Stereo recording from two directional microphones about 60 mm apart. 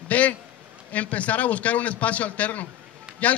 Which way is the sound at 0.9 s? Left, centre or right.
Left.